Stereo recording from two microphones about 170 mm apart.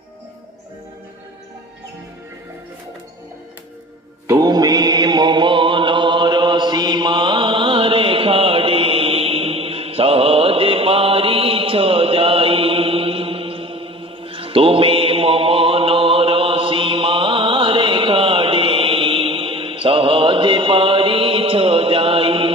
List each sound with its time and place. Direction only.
4.3 s music: 20° right (ahead or behind)